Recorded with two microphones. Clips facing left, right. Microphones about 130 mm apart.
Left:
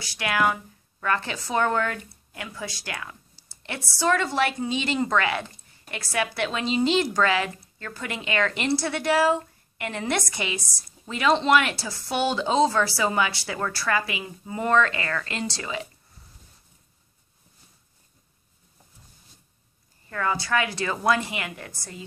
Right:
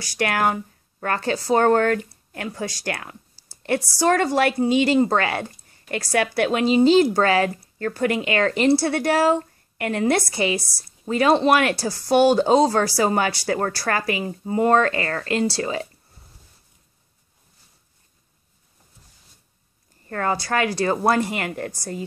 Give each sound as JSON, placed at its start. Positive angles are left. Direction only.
{"t": 0.0, "sound": "speech", "side_deg": -40}
{"t": 4.6, "sound": "a woman's voice", "side_deg": -35}
{"t": 10.1, "sound": "a woman's voice", "side_deg": -35}
{"t": 20.1, "sound": "a woman's voice", "side_deg": -45}